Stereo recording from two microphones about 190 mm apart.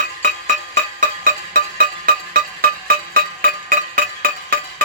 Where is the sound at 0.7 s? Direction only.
45° right (ahead or behind).